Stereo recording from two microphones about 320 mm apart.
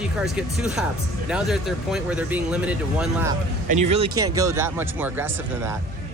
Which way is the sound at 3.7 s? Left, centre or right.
Right.